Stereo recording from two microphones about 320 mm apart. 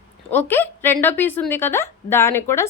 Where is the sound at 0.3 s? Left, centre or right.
Centre.